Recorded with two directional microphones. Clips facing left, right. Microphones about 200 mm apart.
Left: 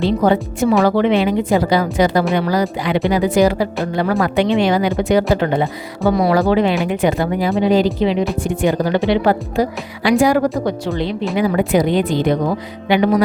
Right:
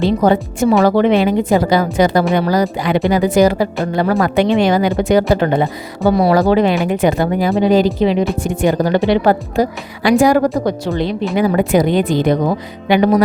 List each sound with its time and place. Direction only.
0.2 s speech: 45° right (ahead or behind)
6.1 s speech: 35° right (ahead or behind)